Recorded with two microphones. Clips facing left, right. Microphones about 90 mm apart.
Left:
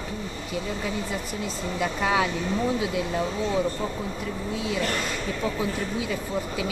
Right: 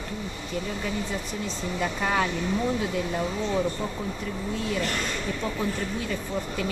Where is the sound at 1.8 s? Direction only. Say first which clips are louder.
Left 2 dB; 5° left (ahead or behind).